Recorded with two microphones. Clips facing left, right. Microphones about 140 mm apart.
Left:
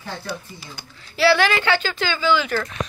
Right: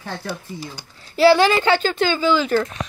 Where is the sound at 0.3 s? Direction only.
45° right (ahead or behind).